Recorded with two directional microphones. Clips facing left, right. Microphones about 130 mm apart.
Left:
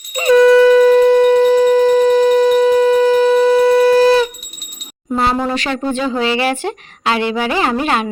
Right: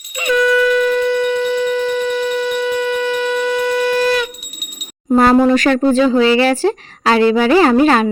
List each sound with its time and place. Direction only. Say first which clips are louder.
0.1 s shofar: left 6 dB; 35° left (ahead or behind)
5.1 s speech: right 6 dB; 50° right (ahead or behind)
6.1 s speech: right 5 dB; 30° left (ahead or behind)
6.6 s speech: right 6 dB; 35° right (ahead or behind)
7.3 s speech: right 6 dB; 20° left (ahead or behind)
7.5 s speech: right 7 dB; 35° right (ahead or behind)